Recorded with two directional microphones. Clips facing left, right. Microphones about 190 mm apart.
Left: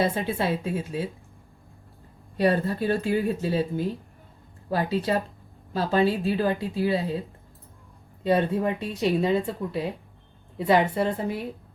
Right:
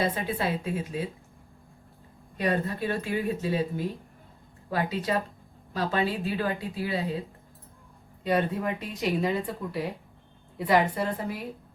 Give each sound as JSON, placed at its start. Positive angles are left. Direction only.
{"t": 0.0, "sound": "speech", "side_deg": 30}
{"t": 2.4, "sound": "speech", "side_deg": 30}
{"t": 8.2, "sound": "speech", "side_deg": 30}